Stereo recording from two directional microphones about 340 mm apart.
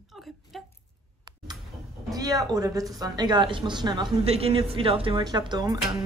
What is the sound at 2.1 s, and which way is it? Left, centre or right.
A woman's voice, centre.